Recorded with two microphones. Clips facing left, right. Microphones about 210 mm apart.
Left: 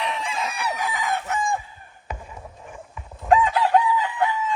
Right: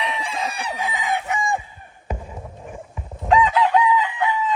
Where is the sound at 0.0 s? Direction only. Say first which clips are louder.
Right 1 dB; centre (ahead or behind).